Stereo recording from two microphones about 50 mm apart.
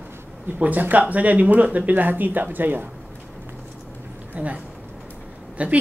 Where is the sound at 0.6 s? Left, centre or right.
Right.